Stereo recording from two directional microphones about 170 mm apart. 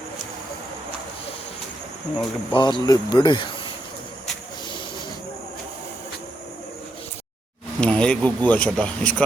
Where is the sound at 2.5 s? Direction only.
25° left (ahead or behind).